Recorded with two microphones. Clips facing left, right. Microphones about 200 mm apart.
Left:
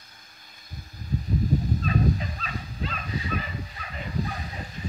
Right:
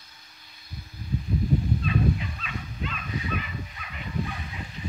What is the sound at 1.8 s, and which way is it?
Dog, 40° left (ahead or behind).